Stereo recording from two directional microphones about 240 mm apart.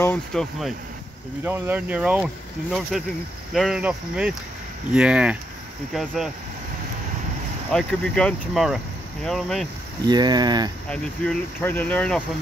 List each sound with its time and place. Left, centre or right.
0.0 s speech: centre
7.7 s speech: centre
10.0 s speech: centre
10.9 s speech: centre